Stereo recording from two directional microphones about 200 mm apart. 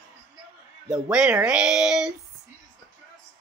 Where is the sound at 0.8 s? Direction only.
5° right (ahead or behind).